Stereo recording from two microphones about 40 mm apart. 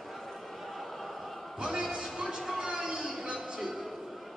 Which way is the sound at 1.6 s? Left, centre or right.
Centre.